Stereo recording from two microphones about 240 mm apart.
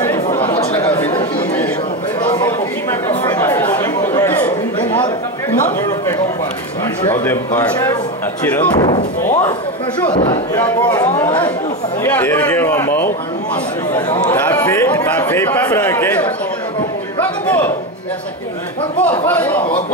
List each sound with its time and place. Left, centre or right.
0.0 s chatter: centre
7.1 s a man's voice: centre
8.7 s a man's voice: centre
17.2 s a sound: centre
18.9 s a man's voice: centre